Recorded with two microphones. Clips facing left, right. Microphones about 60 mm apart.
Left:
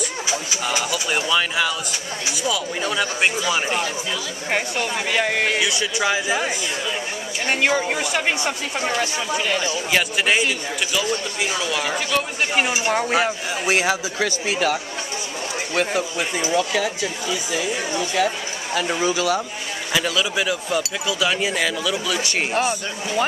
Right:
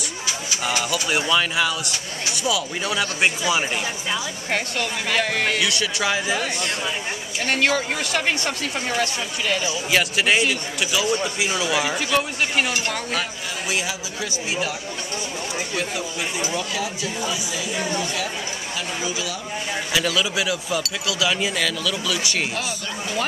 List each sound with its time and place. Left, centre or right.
0.7 s speech: centre
4.5 s speech: centre
5.6 s speech: centre
12.5 s speech: centre
12.9 s speech: left
13.7 s speech: left
14.2 s speech: left
15.7 s speech: left
18.8 s speech: left
19.9 s speech: centre
22.5 s speech: left